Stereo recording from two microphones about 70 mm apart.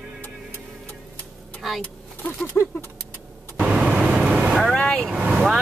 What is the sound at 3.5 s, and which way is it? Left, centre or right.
Vehicle, centre.